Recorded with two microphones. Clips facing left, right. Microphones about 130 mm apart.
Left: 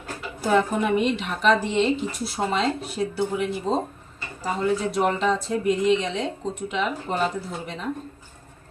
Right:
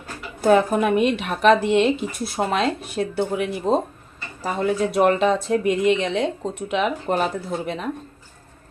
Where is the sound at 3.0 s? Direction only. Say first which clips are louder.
Right 3 dB; 70° right (ahead or behind).